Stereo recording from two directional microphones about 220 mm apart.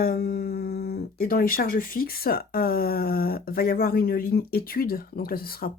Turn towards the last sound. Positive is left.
turn(degrees=40)  # may be behind; listen again after turning